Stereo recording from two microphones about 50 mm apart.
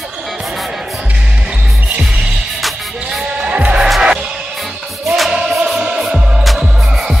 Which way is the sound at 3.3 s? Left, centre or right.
Right.